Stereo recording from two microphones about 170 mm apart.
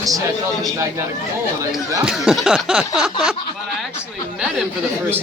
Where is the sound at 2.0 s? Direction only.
5° right (ahead or behind).